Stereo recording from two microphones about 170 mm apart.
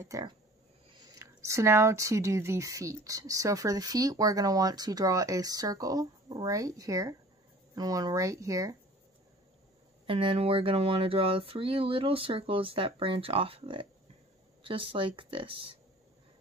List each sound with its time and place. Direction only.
0.0 s speech: 20° right (ahead or behind)
10.0 s speech: 30° right (ahead or behind)